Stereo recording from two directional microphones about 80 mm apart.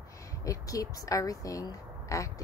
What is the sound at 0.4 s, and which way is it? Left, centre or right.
A woman's voice, left.